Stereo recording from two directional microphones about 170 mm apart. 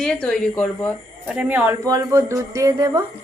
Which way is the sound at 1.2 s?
5° right (ahead or behind).